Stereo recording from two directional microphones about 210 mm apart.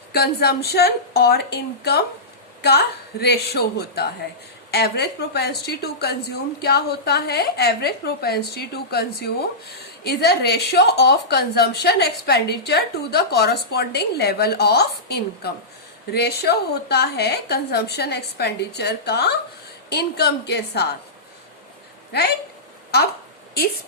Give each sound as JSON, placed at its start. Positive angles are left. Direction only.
{"t": 0.1, "sound": "a woman's voice", "side_deg": 50}